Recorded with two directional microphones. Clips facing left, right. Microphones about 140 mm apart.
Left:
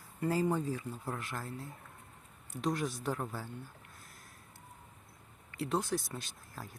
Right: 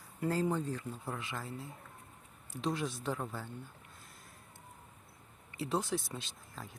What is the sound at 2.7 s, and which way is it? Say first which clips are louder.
Speech: left 1 dB; centre (ahead or behind).